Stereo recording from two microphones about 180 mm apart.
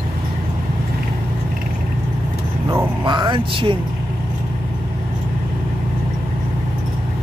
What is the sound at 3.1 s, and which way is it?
Speech, 25° right (ahead or behind).